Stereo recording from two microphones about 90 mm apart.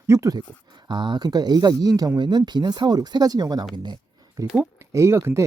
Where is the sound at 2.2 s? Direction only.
55° right (ahead or behind).